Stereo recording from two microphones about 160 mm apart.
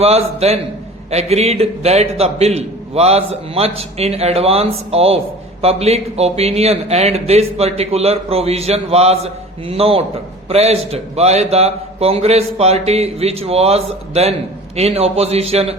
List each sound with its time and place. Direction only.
0.0 s speech: 40° right (ahead or behind)